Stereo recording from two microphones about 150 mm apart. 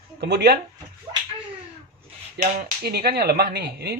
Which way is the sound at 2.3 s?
65° right (ahead or behind).